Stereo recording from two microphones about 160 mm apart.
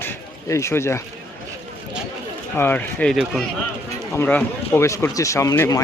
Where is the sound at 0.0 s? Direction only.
15° left (ahead or behind).